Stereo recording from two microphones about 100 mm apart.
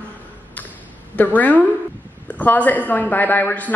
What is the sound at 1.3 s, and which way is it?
A woman's voice, 15° left (ahead or behind).